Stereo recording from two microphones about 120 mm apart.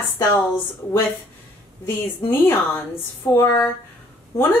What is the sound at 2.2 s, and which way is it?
Speech, 20° left (ahead or behind).